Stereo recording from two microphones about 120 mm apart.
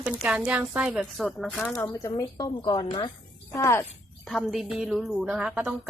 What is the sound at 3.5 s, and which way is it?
Speech, 25° left (ahead or behind).